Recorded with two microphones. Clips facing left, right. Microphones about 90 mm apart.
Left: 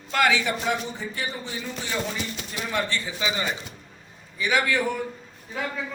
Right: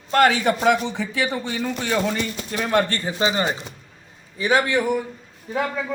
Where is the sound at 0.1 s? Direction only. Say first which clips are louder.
Right 5 dB; 45° right (ahead or behind); by 4.8 s 30° right (ahead or behind).